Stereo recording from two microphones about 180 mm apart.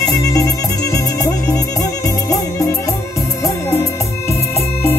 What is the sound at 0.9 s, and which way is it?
Music, 20° left (ahead or behind).